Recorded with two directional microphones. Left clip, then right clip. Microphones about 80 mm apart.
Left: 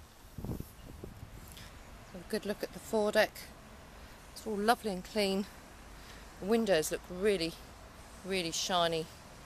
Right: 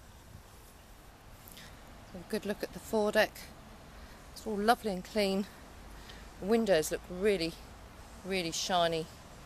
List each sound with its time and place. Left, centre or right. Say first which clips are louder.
2.3 s speech: even; centre